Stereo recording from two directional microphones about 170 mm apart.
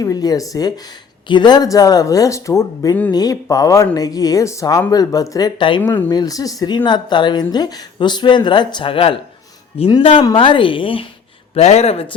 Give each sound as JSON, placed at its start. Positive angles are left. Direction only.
{"t": 0.0, "sound": "a woman's voice", "side_deg": 20}